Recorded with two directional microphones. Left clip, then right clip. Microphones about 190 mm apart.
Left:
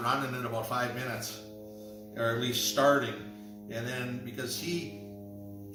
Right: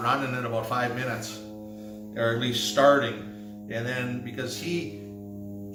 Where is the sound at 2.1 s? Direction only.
15° right (ahead or behind).